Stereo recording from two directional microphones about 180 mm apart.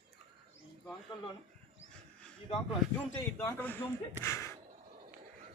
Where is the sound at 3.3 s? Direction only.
10° left (ahead or behind).